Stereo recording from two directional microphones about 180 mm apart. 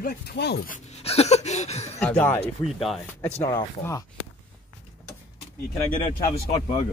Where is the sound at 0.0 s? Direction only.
65° left (ahead or behind).